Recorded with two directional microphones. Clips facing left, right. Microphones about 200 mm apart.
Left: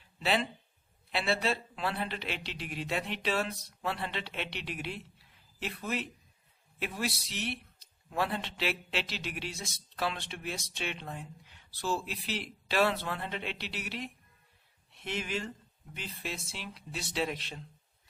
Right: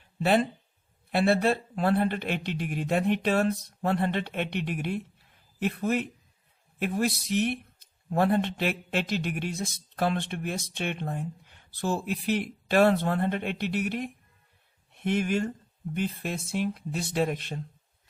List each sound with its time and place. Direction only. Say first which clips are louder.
0.2 s speech: right 7 dB; 50° right (ahead or behind)